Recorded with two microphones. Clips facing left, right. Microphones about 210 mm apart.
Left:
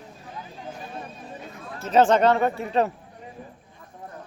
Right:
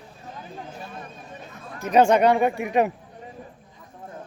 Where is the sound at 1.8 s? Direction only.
15° right (ahead or behind).